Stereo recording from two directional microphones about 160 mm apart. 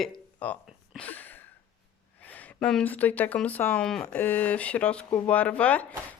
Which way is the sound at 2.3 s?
10° left (ahead or behind).